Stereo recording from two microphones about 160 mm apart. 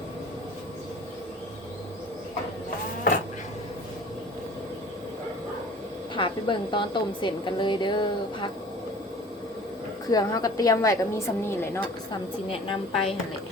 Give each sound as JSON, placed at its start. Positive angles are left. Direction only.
{"t": 6.1, "sound": "a woman's voice", "side_deg": 30}
{"t": 10.1, "sound": "a woman's voice", "side_deg": 25}
{"t": 12.5, "sound": "a woman's voice", "side_deg": 35}